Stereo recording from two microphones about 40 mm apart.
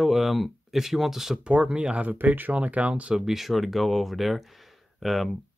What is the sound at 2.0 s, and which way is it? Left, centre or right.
Speech, right.